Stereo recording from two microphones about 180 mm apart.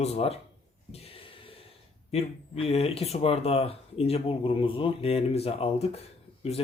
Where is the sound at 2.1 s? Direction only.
35° left (ahead or behind).